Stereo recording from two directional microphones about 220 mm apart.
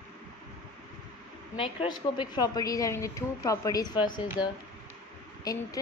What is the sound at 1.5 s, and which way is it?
A woman's voice, 25° left (ahead or behind).